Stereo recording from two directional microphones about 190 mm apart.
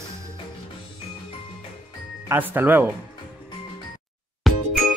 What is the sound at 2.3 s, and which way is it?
Speech, 10° right (ahead or behind).